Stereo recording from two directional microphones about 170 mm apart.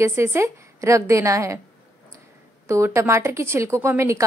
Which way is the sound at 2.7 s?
15° right (ahead or behind).